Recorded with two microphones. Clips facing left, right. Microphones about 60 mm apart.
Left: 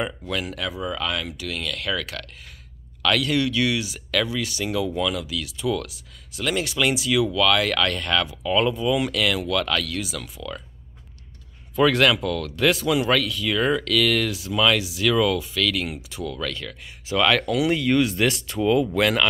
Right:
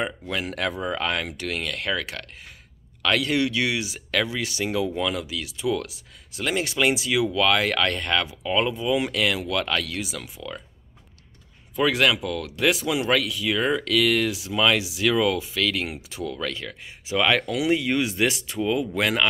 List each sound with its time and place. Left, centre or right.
0.5 s speech: right
0.8 s speech: right
11.7 s speech: centre